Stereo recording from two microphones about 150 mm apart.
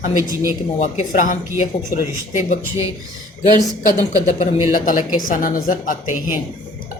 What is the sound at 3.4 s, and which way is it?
A woman's voice, 55° left (ahead or behind).